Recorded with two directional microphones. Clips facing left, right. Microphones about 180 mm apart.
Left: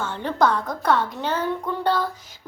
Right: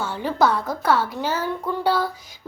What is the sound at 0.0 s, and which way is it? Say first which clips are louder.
A woman's voice: right 1 dB; 5° right (ahead or behind).